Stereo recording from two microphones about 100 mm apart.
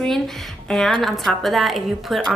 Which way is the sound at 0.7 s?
5° left (ahead or behind).